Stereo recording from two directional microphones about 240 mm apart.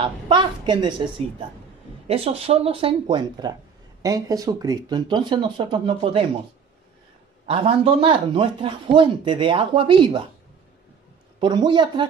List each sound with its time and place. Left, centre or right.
0.0 s speech: centre
7.4 s speech: right
11.3 s speech: centre